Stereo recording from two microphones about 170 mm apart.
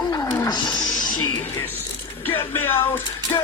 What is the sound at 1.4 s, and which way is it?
Speech, 10° left (ahead or behind).